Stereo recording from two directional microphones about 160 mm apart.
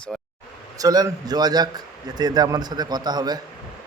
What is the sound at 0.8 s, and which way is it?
A man's voice, 25° right (ahead or behind).